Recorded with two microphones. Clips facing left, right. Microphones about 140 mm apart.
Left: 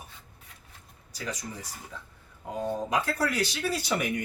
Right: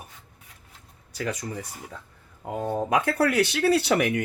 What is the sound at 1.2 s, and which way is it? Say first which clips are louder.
Speech: right 6 dB; 55° right (ahead or behind).